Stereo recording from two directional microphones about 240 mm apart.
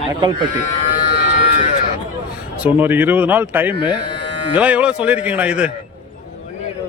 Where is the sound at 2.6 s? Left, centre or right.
Centre.